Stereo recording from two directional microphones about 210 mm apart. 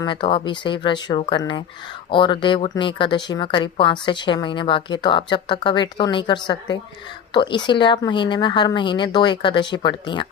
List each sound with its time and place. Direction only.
0.0 s speech: 20° left (ahead or behind)